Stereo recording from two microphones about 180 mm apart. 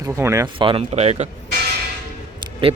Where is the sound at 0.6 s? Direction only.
30° right (ahead or behind).